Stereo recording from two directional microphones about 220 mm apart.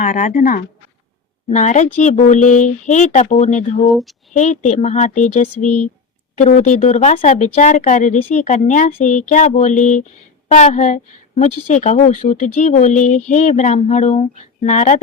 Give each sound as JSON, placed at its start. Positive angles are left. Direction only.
{"t": 0.0, "sound": "speech", "side_deg": 35}
{"t": 3.8, "sound": "speech", "side_deg": 0}
{"t": 4.4, "sound": "speech", "side_deg": 35}
{"t": 5.5, "sound": "speech", "side_deg": 90}
{"t": 6.3, "sound": "speech", "side_deg": 30}